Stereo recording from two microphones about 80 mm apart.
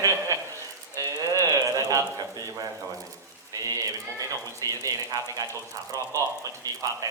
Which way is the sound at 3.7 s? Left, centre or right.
Right.